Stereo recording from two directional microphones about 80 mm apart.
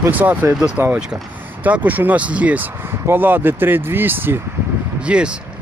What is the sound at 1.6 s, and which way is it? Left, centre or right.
Speech, centre.